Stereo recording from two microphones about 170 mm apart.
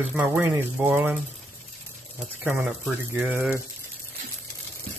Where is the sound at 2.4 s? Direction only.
10° right (ahead or behind).